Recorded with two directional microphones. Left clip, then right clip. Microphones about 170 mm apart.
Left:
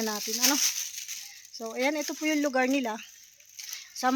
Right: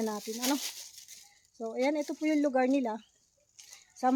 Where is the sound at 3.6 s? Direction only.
Centre (ahead or behind).